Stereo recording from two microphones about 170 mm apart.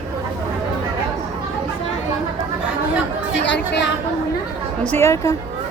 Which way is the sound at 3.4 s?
90° left.